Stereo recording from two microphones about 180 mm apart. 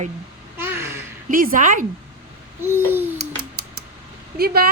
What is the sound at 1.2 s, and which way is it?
Music, 50° right (ahead or behind).